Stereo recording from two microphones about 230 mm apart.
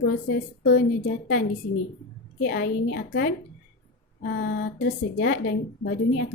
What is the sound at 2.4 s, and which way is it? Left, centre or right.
A woman's voice, left.